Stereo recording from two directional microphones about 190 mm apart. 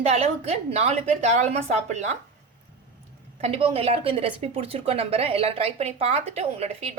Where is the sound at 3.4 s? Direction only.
30° right (ahead or behind).